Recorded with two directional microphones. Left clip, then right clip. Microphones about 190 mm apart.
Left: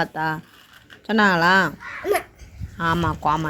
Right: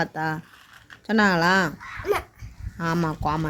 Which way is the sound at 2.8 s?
20° right (ahead or behind).